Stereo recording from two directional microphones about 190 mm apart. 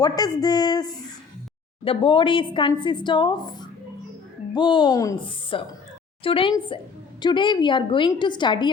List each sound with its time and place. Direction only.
0.0 s a woman's voice: 20° left (ahead or behind)